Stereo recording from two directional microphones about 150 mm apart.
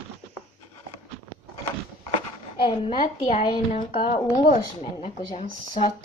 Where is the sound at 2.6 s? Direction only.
35° left (ahead or behind).